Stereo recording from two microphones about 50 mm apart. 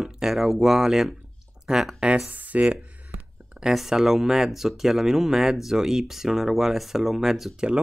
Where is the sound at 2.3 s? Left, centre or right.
Right.